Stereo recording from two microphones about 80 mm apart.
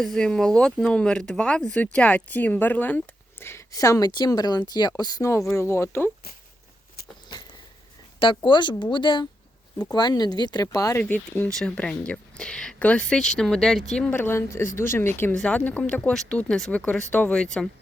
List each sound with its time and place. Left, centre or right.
0.0 s speech: centre
3.7 s speech: left
4.3 s speech: left
5.5 s speech: left
8.4 s speech: left
9.9 s speech: left
11.0 s speech: left
11.5 s speech: centre
14.1 s speech: left; by 16.7 s centre
16.7 s speech: centre
17.3 s speech: centre